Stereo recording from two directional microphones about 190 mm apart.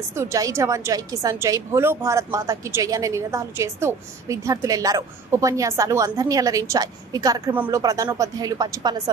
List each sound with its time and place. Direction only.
0.1 s a woman's voice: 15° right (ahead or behind)